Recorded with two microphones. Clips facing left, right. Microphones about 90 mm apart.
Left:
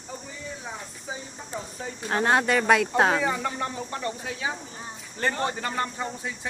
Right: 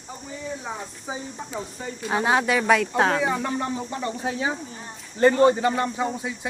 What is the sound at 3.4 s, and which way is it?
Speech, 25° right (ahead or behind).